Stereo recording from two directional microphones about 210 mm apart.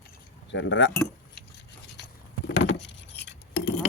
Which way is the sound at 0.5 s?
60° left (ahead or behind).